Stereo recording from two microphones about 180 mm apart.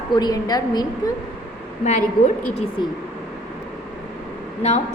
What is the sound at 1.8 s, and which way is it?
Speech, 40° left (ahead or behind).